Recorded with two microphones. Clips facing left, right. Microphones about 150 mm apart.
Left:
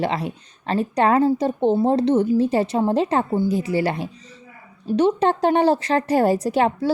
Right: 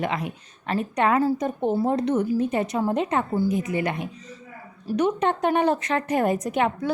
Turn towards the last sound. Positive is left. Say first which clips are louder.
# left 4 dB
turn(degrees=30)  # may be behind; listen again after turning